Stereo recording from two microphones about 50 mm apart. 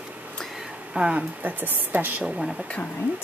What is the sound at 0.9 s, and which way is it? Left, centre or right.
Speech, right.